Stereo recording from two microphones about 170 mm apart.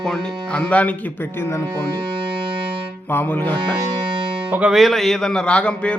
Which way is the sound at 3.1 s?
10° left (ahead or behind).